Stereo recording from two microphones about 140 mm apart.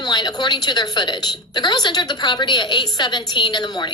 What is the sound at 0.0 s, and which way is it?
A woman's voice, 30° left (ahead or behind).